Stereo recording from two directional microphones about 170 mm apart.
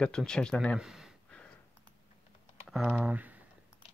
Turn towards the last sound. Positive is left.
turn(degrees=-10)  # may be behind; listen again after turning